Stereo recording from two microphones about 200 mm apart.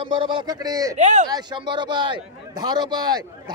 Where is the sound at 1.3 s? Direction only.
20° right (ahead or behind).